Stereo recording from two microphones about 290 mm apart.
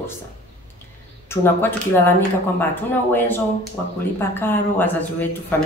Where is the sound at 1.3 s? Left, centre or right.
Centre.